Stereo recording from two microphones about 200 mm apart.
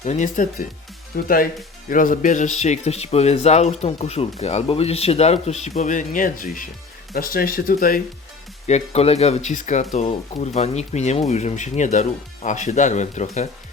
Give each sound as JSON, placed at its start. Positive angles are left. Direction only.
{"t": 0.0, "sound": "speech", "side_deg": 35}
{"t": 8.6, "sound": "speech", "side_deg": 35}